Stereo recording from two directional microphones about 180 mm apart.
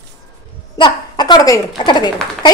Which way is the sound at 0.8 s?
25° left (ahead or behind).